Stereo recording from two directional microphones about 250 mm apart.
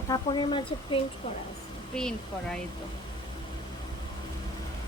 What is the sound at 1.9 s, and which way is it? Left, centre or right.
Speech, centre.